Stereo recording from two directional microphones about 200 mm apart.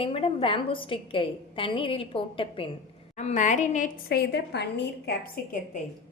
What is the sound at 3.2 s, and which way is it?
A woman's voice, 35° left (ahead or behind).